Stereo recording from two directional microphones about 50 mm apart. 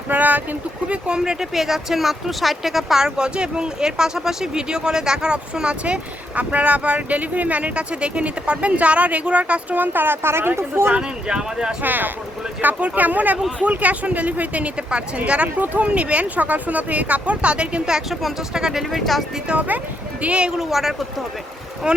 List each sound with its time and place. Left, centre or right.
0.1 s speech: right
0.9 s speech: centre
3.0 s speech: centre; by 10.9 s right
10.9 s speech: centre
11.8 s speech: right
15.6 s speech: right
16.0 s speech: right; by 18.9 s centre
18.9 s speech: centre
19.5 s speech: right
20.6 s speech: centre
21.8 s speech: centre